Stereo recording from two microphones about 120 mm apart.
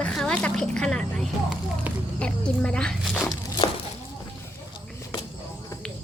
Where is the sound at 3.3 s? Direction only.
35° left (ahead or behind).